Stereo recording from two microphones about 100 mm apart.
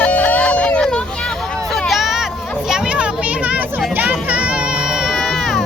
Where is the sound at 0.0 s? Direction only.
15° left (ahead or behind).